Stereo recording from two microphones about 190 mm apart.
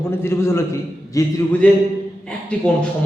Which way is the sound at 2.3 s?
5° left (ahead or behind).